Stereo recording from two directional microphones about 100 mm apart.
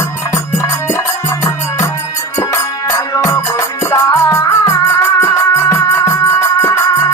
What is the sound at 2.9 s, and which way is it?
Music, 35° left (ahead or behind).